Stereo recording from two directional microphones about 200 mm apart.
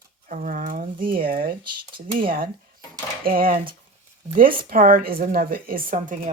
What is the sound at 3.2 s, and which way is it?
A woman's voice, 45° right (ahead or behind).